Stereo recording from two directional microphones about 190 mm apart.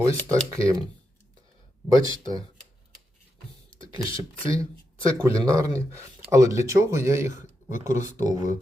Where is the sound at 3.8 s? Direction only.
30° left (ahead or behind).